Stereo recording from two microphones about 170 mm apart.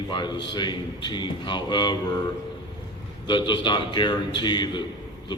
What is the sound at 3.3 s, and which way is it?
Mantra, 25° left (ahead or behind).